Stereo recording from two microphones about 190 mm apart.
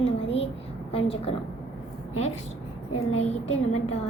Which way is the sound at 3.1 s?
35° left (ahead or behind).